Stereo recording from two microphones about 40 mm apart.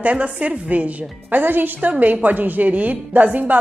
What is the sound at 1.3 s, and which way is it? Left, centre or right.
Speech, right.